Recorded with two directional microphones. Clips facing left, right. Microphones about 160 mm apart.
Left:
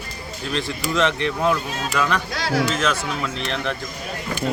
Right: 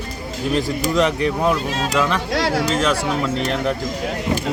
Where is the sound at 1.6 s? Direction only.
90° right.